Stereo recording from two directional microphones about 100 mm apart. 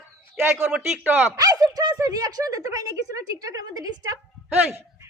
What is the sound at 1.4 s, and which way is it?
A man's voice, 35° right (ahead or behind).